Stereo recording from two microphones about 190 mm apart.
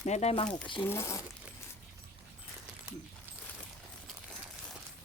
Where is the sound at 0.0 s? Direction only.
35° left (ahead or behind).